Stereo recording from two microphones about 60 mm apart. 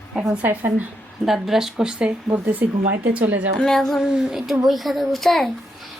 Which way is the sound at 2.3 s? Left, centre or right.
Right.